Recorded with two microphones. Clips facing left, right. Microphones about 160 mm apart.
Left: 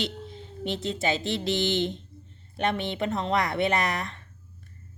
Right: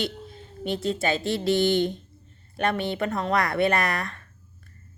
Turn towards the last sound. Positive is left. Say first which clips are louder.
# right 1 dB
turn(degrees=20)  # may be behind; listen again after turning